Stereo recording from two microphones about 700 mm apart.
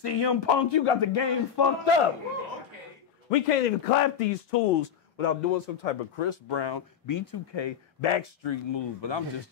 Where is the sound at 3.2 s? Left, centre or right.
Left.